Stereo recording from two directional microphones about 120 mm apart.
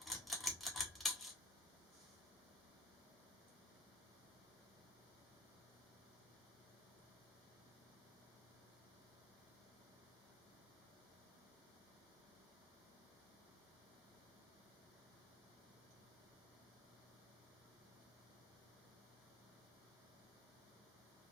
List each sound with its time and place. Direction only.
0.0 s typewriter: centre (ahead or behind)